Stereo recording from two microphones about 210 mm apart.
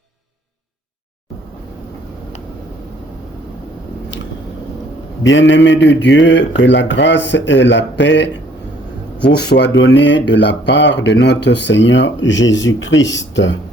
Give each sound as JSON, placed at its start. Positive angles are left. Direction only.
{"t": 5.2, "sound": "a man's voice", "side_deg": 60}